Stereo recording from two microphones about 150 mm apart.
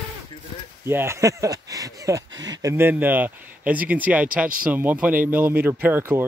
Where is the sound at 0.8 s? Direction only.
15° right (ahead or behind).